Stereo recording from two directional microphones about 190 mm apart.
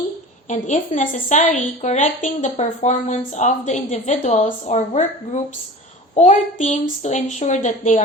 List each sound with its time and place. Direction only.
0.4 s a woman's voice: 40° left (ahead or behind)